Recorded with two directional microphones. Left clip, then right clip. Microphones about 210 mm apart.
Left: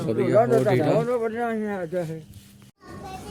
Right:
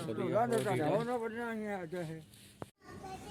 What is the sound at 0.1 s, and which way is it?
Speech, 20° left (ahead or behind).